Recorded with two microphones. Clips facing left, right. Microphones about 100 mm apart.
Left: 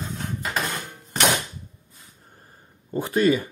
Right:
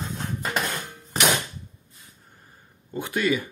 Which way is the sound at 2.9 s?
35° left (ahead or behind).